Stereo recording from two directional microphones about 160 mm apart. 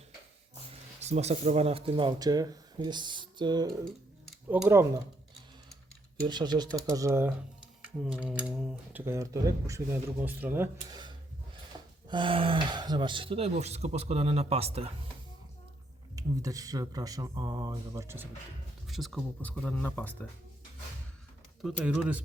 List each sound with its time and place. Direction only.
0.9 s speech: 45° right (ahead or behind); by 3.7 s 25° right (ahead or behind)
4.4 s speech: 10° right (ahead or behind)
6.2 s speech: 25° right (ahead or behind)
12.0 s speech: 30° right (ahead or behind)
16.1 s speech: 20° right (ahead or behind)
18.9 s speech: centre (ahead or behind)
21.6 s speech: 5° right (ahead or behind)